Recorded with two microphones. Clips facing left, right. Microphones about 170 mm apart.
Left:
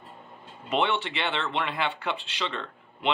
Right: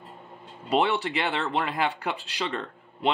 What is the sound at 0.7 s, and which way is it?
Speech, 40° right (ahead or behind).